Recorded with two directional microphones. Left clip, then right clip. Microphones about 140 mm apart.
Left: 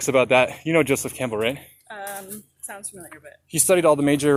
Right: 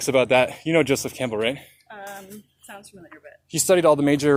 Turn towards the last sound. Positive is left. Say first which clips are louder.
# even
turn(degrees=-20)  # may be behind; listen again after turning